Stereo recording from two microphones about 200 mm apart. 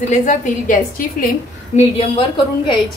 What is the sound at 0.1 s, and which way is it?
Speech, 40° left (ahead or behind).